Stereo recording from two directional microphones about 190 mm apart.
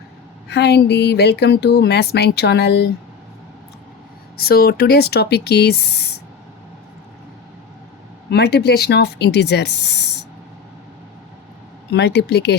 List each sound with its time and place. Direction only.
0.4 s speech: 60° left (ahead or behind)
4.4 s speech: 55° left (ahead or behind)
8.3 s speech: 60° left (ahead or behind)
11.9 s speech: 60° left (ahead or behind)